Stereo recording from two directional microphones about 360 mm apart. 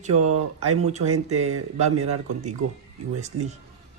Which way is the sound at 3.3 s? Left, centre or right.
Right.